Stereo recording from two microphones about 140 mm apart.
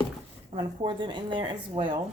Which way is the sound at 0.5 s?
35° right (ahead or behind).